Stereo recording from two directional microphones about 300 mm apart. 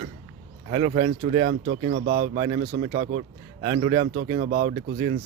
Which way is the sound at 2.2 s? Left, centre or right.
Centre.